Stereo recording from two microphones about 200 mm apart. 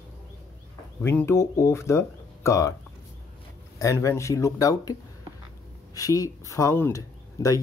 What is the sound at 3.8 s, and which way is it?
Speech, 15° left (ahead or behind).